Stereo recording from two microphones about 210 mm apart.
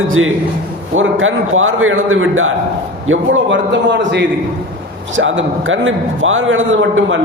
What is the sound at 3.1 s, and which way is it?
A man's voice, 65° right (ahead or behind).